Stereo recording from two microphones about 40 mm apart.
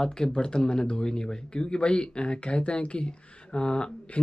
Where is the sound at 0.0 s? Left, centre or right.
Centre.